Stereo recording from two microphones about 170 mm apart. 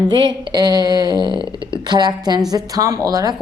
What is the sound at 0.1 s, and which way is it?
Speech, 25° right (ahead or behind).